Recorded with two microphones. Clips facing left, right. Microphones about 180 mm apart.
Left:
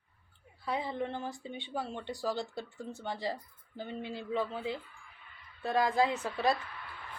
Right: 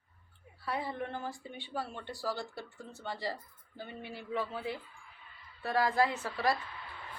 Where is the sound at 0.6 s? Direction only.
15° left (ahead or behind).